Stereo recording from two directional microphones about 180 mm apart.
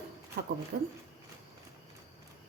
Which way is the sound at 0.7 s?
55° right (ahead or behind).